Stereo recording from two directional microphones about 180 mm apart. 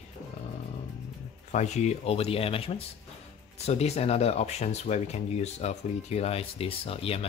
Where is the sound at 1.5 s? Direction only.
40° left (ahead or behind).